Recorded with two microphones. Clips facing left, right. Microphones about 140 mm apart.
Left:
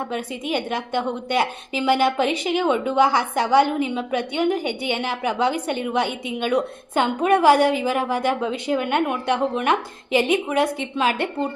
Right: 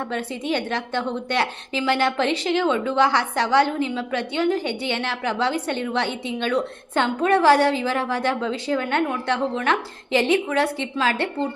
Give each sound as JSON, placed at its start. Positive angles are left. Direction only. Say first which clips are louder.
{"t": 0.1, "sound": "a woman's voice", "louder": "even", "side_deg": 10}